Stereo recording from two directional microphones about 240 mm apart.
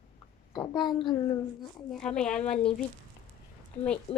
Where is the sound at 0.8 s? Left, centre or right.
Centre.